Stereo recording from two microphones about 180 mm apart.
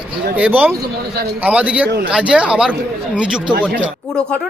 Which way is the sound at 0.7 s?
65° right (ahead or behind).